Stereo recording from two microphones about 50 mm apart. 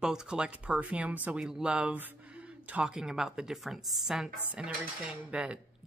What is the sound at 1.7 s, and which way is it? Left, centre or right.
Speech, right.